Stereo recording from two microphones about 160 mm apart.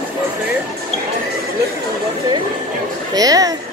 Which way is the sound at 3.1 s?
20° right (ahead or behind).